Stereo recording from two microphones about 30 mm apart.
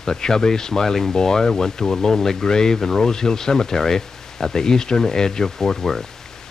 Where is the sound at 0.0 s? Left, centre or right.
Left.